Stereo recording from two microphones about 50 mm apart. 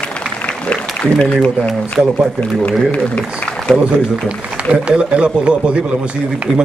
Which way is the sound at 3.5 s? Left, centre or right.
Centre.